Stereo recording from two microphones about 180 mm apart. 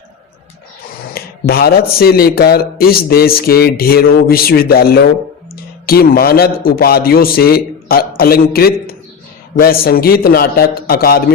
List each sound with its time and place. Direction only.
1.1 s speech: 55° left (ahead or behind)